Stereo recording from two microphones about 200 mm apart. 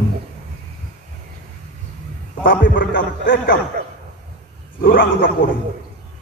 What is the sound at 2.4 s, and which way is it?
A man's voice, 45° left (ahead or behind).